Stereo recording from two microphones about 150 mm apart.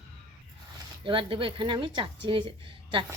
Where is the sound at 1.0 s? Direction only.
35° right (ahead or behind).